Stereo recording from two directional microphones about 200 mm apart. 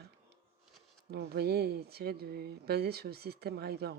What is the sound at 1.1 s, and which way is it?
Speech, 55° right (ahead or behind).